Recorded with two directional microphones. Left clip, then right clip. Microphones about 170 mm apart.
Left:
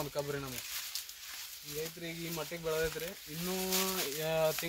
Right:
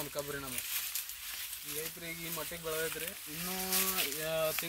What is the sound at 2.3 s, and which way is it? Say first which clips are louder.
Speech: left 3 dB; 10° left (ahead or behind).